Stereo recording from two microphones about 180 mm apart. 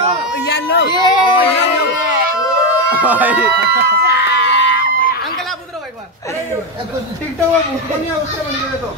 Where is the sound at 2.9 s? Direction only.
10° right (ahead or behind).